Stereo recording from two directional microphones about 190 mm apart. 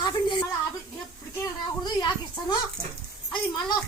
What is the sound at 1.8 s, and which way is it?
Speech, 20° left (ahead or behind).